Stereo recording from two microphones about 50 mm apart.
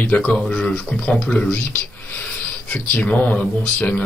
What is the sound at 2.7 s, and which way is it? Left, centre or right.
Speech, left.